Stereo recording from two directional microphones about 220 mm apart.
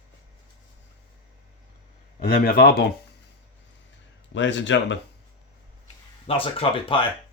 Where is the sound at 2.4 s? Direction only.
45° left (ahead or behind).